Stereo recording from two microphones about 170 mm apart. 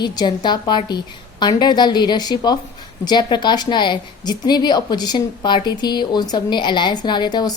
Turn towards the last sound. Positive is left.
turn(degrees=25)  # may be behind; listen again after turning